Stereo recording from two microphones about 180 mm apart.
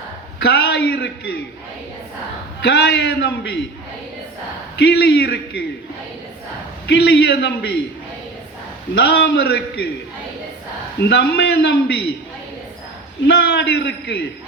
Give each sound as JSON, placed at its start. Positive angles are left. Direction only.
{"t": 0.4, "sound": "a sound", "side_deg": 65}
{"t": 0.9, "sound": "a man's voice", "side_deg": 65}
{"t": 2.6, "sound": "a man's voice", "side_deg": 70}
{"t": 4.8, "sound": "a man's voice", "side_deg": 65}
{"t": 6.8, "sound": "a man's voice", "side_deg": 70}
{"t": 9.0, "sound": "a man's voice", "side_deg": 65}
{"t": 11.0, "sound": "a man's voice", "side_deg": 65}
{"t": 13.2, "sound": "a man's voice", "side_deg": 70}